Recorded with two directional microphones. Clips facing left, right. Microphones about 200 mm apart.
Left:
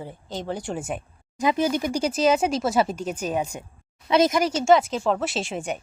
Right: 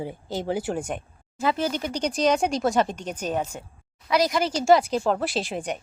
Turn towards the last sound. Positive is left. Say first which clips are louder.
# even
turn(degrees=0)  # may be behind; listen again after turning